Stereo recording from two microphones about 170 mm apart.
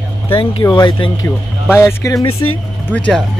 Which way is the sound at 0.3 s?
30° left (ahead or behind).